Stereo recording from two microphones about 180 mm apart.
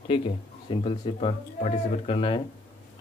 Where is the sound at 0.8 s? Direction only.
35° left (ahead or behind).